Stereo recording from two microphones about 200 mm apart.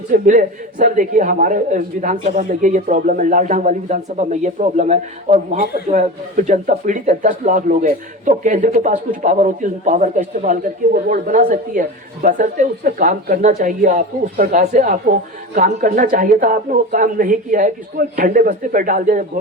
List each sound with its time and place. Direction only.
0.1 s speech: 40° right (ahead or behind)